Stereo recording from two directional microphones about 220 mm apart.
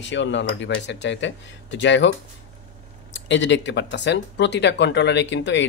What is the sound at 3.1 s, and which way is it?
Speech, 55° left (ahead or behind).